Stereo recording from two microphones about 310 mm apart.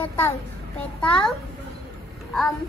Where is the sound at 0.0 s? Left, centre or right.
Centre.